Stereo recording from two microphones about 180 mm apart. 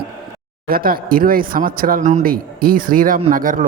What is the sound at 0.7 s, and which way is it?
A man's voice, 55° right (ahead or behind).